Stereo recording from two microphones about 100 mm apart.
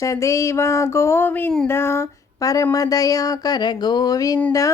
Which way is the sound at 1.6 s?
25° left (ahead or behind).